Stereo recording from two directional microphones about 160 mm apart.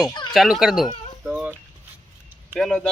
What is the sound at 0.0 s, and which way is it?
Children playing, 25° left (ahead or behind).